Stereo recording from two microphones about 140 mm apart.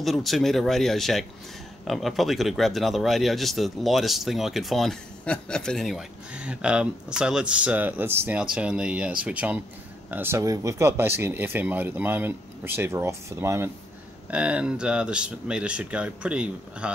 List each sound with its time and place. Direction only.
0.0 s speech: centre (ahead or behind); by 13.7 s 20° right (ahead or behind)
14.3 s speech: 10° right (ahead or behind)